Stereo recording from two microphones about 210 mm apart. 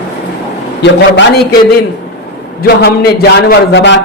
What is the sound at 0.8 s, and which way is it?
Speech, 55° left (ahead or behind).